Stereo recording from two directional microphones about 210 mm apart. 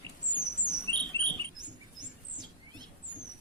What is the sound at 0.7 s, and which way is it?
Rodents, 20° right (ahead or behind).